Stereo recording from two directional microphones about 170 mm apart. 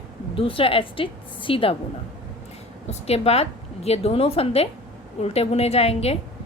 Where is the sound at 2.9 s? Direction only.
40° left (ahead or behind).